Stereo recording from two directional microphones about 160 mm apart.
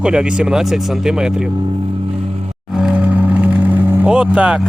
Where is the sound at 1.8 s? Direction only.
40° right (ahead or behind).